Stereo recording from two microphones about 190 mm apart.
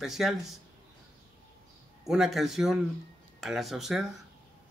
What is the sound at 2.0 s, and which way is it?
A man's voice, centre (ahead or behind).